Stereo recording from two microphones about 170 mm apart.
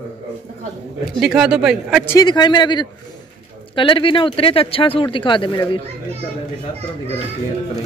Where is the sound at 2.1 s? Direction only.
25° left (ahead or behind).